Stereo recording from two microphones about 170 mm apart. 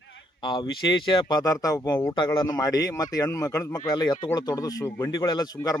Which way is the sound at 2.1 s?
25° left (ahead or behind).